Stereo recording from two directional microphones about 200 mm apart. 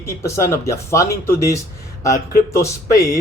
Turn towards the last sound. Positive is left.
turn(degrees=15)  # may be behind; listen again after turning